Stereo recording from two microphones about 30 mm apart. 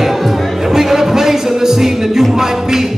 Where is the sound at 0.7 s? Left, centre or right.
Centre.